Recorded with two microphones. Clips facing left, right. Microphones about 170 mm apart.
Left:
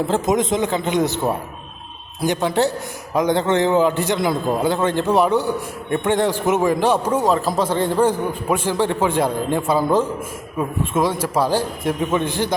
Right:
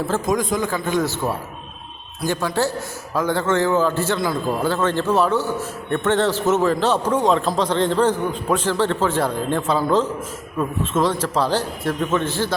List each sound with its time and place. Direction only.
0.0 s a man's voice: 20° left (ahead or behind)